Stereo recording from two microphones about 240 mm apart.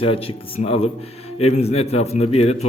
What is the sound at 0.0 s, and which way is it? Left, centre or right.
A man's voice, left.